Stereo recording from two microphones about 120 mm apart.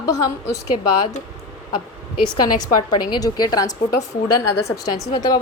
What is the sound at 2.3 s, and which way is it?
A woman's voice, 35° left (ahead or behind).